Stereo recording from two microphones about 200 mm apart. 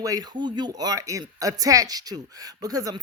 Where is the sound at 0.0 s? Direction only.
20° right (ahead or behind).